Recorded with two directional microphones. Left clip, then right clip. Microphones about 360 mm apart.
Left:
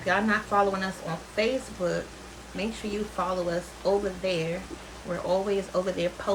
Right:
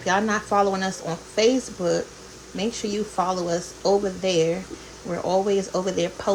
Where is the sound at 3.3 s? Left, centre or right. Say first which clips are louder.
Right 4 dB; centre.